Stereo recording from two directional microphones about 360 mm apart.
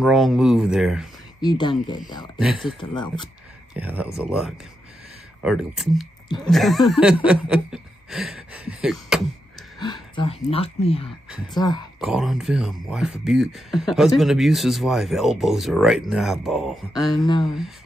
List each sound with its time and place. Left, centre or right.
0.0 s speech: centre
1.4 s speech: centre
2.3 s speech: centre
2.8 s speech: centre
3.7 s speech: centre
6.2 s speech: centre
6.5 s speech: centre
10.1 s speech: centre
12.0 s speech: centre